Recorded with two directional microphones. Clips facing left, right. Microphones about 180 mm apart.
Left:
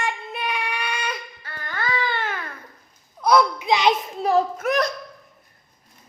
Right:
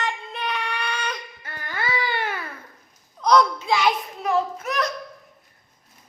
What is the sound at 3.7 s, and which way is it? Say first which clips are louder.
Hands: left 4 dB; 20° left (ahead or behind).